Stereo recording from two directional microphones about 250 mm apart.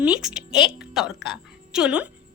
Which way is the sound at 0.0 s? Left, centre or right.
Centre.